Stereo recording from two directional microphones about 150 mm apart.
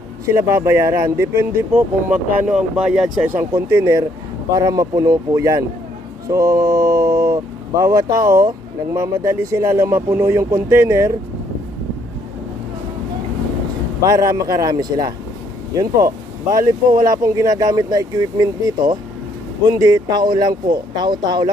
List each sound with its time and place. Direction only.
0.3 s speech: 20° right (ahead or behind)
14.1 s speech: 20° right (ahead or behind)